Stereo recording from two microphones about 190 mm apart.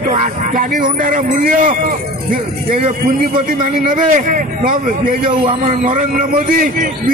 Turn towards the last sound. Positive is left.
turn(degrees=-45)  # may be behind; listen again after turning